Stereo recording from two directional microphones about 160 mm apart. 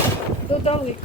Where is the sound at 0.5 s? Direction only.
35° left (ahead or behind).